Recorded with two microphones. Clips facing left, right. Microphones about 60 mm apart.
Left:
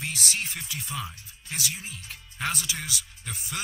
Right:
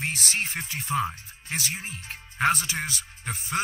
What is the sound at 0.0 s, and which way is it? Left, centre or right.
Speech, right.